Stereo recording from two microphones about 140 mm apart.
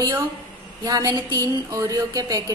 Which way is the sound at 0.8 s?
30° right (ahead or behind).